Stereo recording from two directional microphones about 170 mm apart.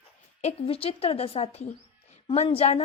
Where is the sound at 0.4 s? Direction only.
35° left (ahead or behind).